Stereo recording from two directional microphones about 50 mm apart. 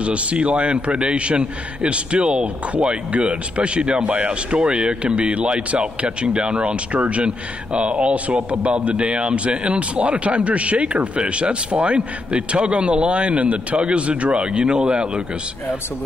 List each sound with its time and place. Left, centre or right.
0.0 s a man's voice: right